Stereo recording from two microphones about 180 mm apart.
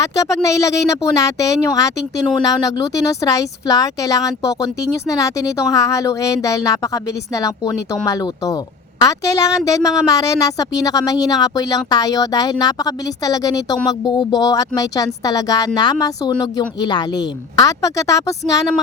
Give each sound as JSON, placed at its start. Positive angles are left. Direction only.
{"t": 0.4, "sound": "speech", "side_deg": 15}